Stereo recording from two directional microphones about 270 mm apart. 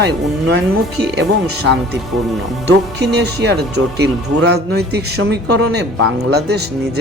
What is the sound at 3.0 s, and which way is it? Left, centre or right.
Speech, right.